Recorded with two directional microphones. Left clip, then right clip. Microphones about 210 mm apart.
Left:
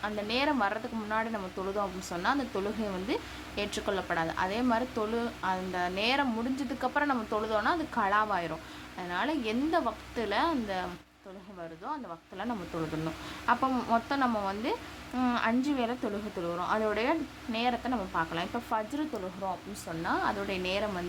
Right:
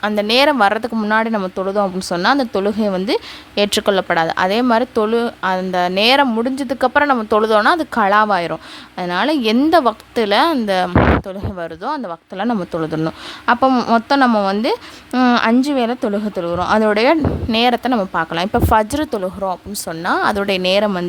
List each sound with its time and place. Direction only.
0.0 s speech: 55° right (ahead or behind)
20.1 s speech: 55° right (ahead or behind)